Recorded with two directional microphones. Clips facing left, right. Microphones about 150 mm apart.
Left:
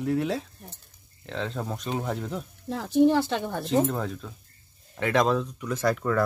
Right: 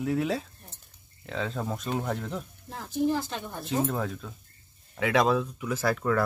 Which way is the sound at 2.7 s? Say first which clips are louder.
Left 7 dB; 80° left.